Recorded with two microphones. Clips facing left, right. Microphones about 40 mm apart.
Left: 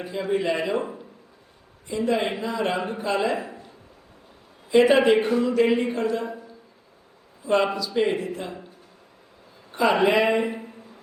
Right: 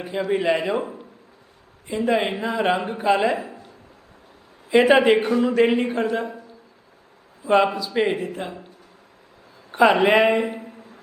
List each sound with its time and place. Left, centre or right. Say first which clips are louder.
0.3 s speech: right 2 dB; right
0.8 s speech: right 1 dB; centre
1.9 s a man's voice: right 2 dB; right
4.7 s speech: right 2 dB; right
5.4 s a man's voice: right 2 dB; right
7.4 s a man's voice: right 3 dB; right
9.7 s a man's voice: right 4 dB; right
10.4 s a sound: right 1 dB; centre